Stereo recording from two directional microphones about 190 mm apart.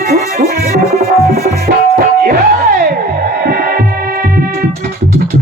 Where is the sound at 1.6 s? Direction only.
50° right (ahead or behind).